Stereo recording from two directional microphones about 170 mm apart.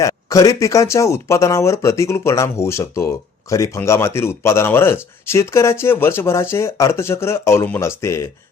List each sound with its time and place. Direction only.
0.0 s speech: 20° left (ahead or behind)